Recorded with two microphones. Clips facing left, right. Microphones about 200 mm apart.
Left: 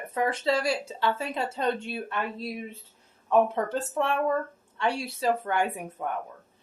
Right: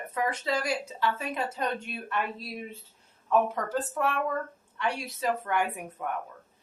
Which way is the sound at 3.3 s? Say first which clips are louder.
Left 3 dB; 25° left (ahead or behind).